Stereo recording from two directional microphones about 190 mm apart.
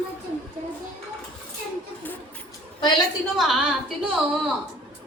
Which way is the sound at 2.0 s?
5° left (ahead or behind).